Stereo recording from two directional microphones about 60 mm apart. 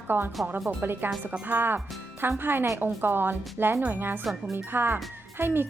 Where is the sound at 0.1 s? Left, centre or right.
Right.